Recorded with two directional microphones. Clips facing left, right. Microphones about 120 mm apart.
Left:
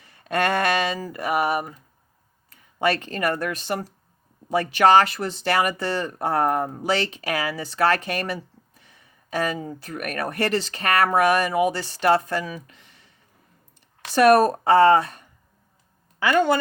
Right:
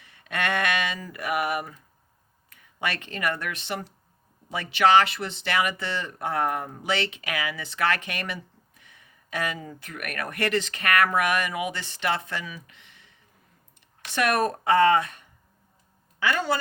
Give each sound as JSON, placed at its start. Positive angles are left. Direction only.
{"t": 0.0, "sound": "speech", "side_deg": 40}
{"t": 16.2, "sound": "speech", "side_deg": 50}